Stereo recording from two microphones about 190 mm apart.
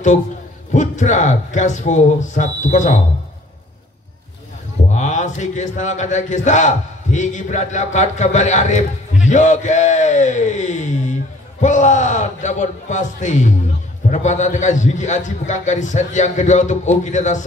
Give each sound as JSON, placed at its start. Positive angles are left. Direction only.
{"t": 0.7, "sound": "a man's voice", "side_deg": 40}
{"t": 4.9, "sound": "a man's voice", "side_deg": 40}